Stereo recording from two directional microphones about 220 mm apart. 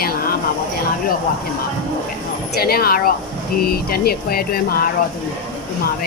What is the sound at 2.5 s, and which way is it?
Speech, 45° left (ahead or behind).